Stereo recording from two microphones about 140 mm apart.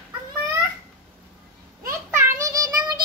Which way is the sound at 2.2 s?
25° right (ahead or behind).